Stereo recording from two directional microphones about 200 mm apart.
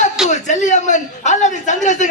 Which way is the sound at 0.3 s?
35° left (ahead or behind).